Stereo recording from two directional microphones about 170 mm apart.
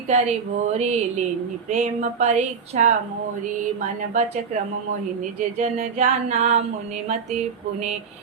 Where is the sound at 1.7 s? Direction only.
45° right (ahead or behind).